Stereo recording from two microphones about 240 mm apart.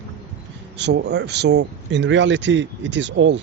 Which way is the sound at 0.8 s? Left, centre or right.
Right.